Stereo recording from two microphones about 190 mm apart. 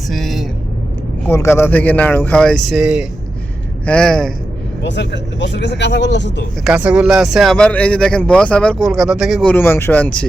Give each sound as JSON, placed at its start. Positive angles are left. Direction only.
{"t": 0.1, "sound": "speech", "side_deg": 0}
{"t": 1.3, "sound": "speech", "side_deg": 15}
{"t": 4.8, "sound": "speech", "side_deg": 70}
{"t": 6.7, "sound": "speech", "side_deg": -5}